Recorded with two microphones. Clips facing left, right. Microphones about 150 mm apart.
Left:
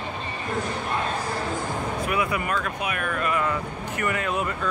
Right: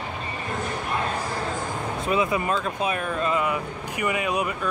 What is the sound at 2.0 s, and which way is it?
Speech, 25° right (ahead or behind).